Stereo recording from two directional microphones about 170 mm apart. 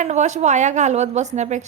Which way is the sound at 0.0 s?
45° right (ahead or behind).